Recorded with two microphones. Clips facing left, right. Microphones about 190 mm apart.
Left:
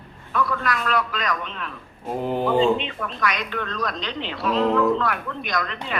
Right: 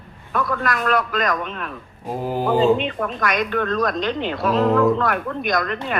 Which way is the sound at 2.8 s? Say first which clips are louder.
Right 4 dB; 50° right (ahead or behind).